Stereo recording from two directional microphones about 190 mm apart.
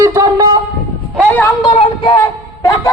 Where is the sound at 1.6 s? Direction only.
30° left (ahead or behind).